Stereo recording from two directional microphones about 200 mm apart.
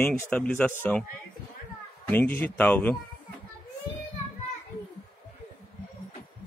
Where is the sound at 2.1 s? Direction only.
10° left (ahead or behind).